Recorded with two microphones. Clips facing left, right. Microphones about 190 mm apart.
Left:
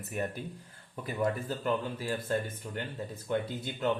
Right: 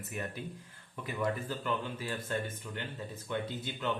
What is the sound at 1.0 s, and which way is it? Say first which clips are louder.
Speech: left 3 dB; 35° left (ahead or behind).